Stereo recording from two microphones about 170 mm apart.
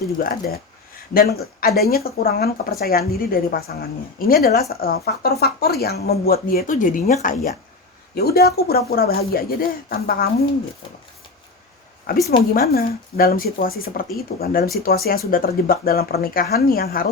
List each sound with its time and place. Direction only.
0.2 s speech: 55° left (ahead or behind)
8.1 s speech: 65° left (ahead or behind)
12.5 s speech: 60° left (ahead or behind)